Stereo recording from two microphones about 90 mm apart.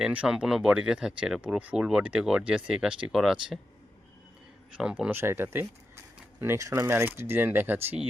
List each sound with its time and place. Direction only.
0.0 s speech: 10° right (ahead or behind)
4.8 s speech: 10° right (ahead or behind)
5.1 s speech: 25° right (ahead or behind)